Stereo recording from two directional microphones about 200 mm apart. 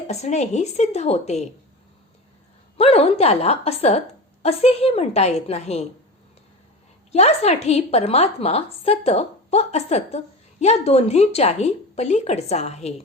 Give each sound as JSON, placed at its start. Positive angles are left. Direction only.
{"t": 0.1, "sound": "a woman's voice", "side_deg": 35}
{"t": 2.7, "sound": "a woman's voice", "side_deg": 30}
{"t": 7.1, "sound": "a woman's voice", "side_deg": 30}